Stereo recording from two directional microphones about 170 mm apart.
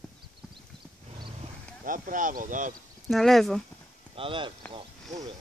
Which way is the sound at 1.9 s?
50° right (ahead or behind).